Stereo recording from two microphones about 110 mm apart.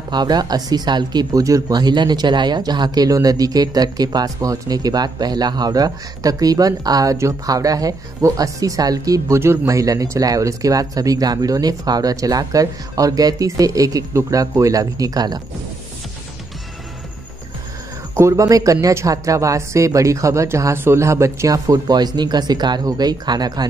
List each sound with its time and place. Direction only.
0.1 s speech: 40° right (ahead or behind)
18.1 s speech: 25° right (ahead or behind)